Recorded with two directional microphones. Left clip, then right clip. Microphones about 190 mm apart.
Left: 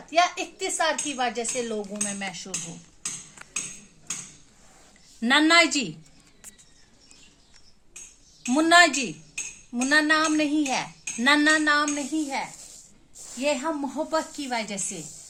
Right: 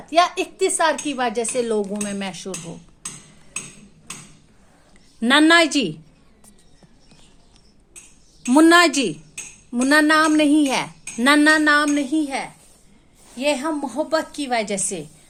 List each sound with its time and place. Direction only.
0.1 s speech: 55° right (ahead or behind)
5.2 s speech: 50° right (ahead or behind)
8.4 s speech: 55° right (ahead or behind)